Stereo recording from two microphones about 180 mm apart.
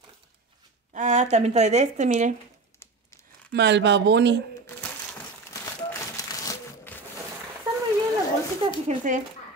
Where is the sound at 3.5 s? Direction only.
75° right (ahead or behind).